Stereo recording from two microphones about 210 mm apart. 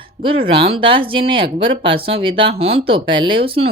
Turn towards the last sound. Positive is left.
turn(degrees=-25)  # may be behind; listen again after turning